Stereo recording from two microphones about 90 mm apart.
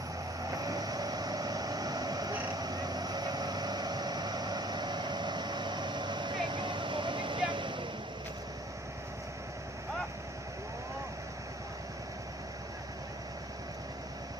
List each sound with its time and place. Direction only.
0.4 s vehicle: 40° right (ahead or behind); by 7.9 s 65° right (ahead or behind)